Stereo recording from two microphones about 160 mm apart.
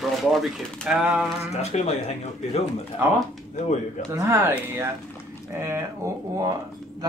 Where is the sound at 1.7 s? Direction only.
45° left (ahead or behind).